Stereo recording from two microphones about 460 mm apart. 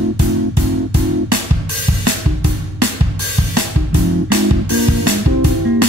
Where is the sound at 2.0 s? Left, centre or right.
Right.